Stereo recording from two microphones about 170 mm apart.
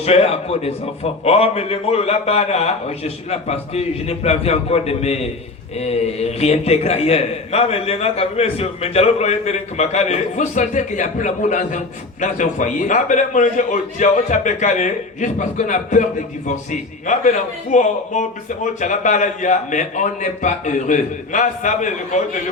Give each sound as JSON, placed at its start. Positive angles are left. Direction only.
{"t": 0.0, "sound": "a man's voice", "side_deg": 35}
{"t": 17.1, "sound": "a man's voice", "side_deg": 45}